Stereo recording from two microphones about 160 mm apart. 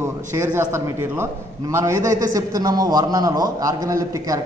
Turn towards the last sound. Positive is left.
turn(degrees=-20)  # may be behind; listen again after turning